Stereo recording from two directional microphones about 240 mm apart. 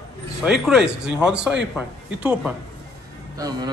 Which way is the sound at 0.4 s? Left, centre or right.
Centre.